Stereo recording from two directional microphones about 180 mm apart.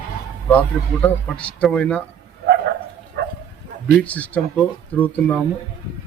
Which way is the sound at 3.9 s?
10° left (ahead or behind).